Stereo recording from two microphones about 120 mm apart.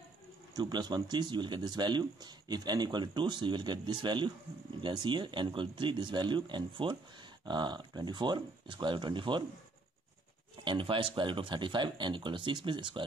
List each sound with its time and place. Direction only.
0.6 s speech: 35° right (ahead or behind)
10.6 s speech: 45° right (ahead or behind)